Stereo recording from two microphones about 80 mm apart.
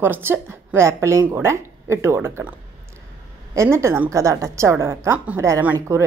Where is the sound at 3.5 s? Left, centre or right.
Right.